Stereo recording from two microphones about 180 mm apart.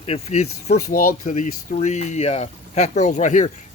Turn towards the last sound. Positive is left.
turn(degrees=40)  # may be behind; listen again after turning